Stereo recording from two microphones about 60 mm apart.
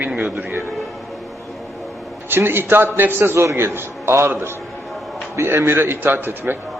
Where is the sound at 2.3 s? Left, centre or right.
Right.